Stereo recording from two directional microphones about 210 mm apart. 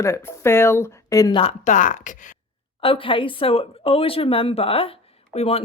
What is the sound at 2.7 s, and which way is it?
A woman's voice, 25° left (ahead or behind).